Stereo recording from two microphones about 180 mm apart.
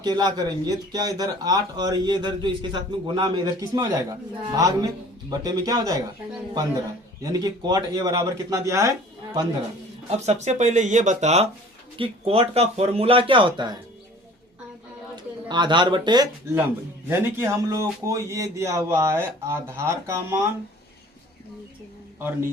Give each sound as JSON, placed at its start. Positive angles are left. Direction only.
{"t": 0.0, "sound": "speech", "side_deg": -25}
{"t": 7.2, "sound": "speech", "side_deg": -20}
{"t": 10.1, "sound": "speech", "side_deg": -40}
{"t": 15.1, "sound": "speech", "side_deg": -25}